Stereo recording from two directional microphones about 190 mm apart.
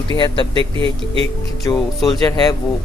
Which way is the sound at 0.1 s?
25° left (ahead or behind).